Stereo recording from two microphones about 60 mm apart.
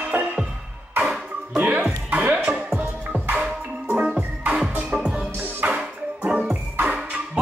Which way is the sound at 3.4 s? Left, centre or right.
Centre.